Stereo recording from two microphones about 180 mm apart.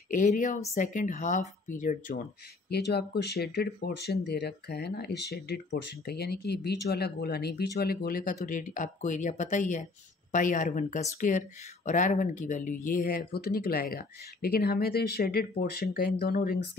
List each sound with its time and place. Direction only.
0.1 s speech: 45° left (ahead or behind)
2.7 s speech: 65° left (ahead or behind)